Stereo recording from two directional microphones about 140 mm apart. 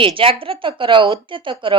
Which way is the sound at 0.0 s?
40° right (ahead or behind).